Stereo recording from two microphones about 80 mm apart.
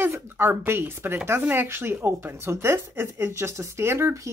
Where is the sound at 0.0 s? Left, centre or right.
Right.